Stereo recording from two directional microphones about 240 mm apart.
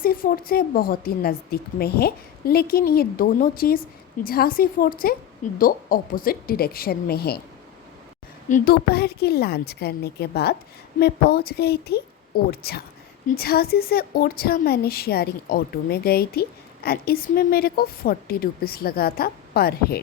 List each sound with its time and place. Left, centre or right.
0.0 s a woman's voice: left
8.4 s a woman's voice: left